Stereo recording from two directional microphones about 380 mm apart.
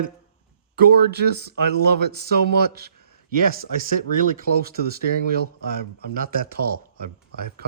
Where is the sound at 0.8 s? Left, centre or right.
Right.